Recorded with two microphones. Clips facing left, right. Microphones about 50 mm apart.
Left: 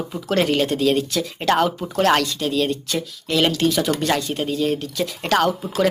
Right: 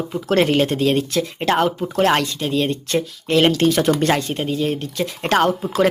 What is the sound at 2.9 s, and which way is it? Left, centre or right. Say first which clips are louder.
Speech: right 5 dB; right.